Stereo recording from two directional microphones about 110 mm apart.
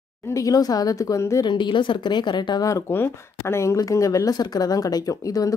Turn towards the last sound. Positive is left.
turn(degrees=30)  # may be behind; listen again after turning